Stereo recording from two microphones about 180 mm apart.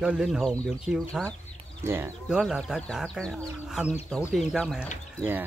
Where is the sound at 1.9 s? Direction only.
15° right (ahead or behind).